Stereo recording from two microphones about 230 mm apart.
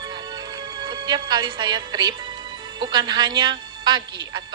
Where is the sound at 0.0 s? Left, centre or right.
Centre.